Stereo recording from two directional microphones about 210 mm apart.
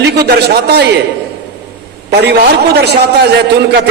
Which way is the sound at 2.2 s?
50° right (ahead or behind).